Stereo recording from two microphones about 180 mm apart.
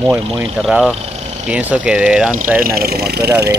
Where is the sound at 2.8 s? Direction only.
60° right (ahead or behind).